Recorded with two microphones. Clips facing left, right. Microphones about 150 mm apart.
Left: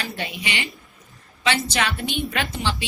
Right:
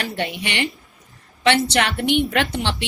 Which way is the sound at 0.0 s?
70° right (ahead or behind).